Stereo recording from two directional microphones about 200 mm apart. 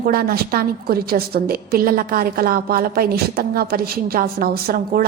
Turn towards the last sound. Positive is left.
turn(degrees=-50)  # may be behind; listen again after turning